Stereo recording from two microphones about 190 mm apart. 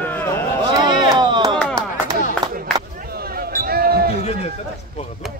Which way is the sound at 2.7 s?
20° right (ahead or behind).